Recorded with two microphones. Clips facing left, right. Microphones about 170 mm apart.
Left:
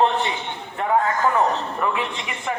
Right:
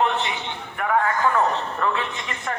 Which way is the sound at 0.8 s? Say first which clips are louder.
Left 2 dB; 25° left (ahead or behind).